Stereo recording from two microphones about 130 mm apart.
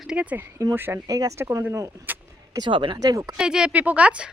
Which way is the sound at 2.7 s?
40° right (ahead or behind).